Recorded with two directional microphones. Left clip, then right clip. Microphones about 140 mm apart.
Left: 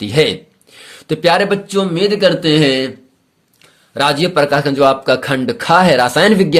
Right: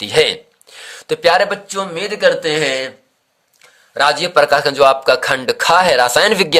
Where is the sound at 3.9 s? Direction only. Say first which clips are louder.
Right 1 dB; 15° right (ahead or behind).